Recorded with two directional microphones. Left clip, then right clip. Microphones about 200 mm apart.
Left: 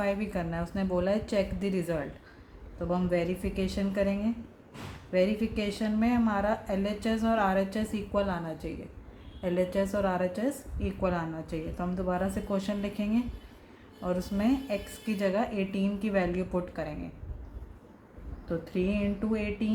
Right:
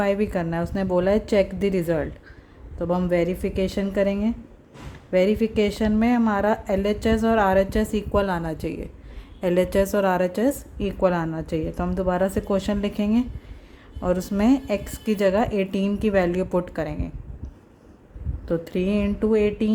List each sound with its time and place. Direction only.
0.0 s a woman's voice: 45° right (ahead or behind)
18.4 s a woman's voice: 50° right (ahead or behind)